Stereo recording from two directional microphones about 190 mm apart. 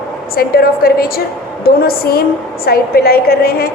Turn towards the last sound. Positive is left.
turn(degrees=55)  # may be behind; listen again after turning